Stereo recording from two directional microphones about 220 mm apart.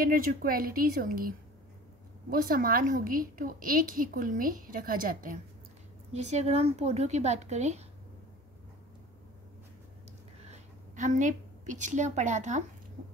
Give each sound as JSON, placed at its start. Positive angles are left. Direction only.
{"t": 0.0, "sound": "a woman's voice", "side_deg": -40}
{"t": 2.3, "sound": "a woman's voice", "side_deg": -40}
{"t": 11.0, "sound": "a woman's voice", "side_deg": -35}